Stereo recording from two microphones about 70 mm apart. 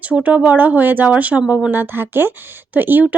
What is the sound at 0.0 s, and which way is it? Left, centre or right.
Speech, right.